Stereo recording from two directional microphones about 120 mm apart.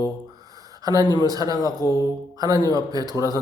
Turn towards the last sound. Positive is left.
turn(degrees=-30)  # may be behind; listen again after turning